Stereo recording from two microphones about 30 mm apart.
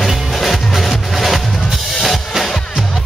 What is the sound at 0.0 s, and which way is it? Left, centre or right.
Music, centre.